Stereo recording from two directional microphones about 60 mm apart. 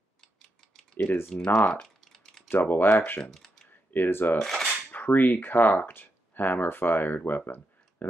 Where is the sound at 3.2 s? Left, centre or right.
Centre.